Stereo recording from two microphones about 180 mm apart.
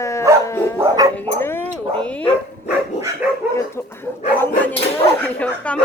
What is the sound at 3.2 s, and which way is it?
Dog, 5° right (ahead or behind).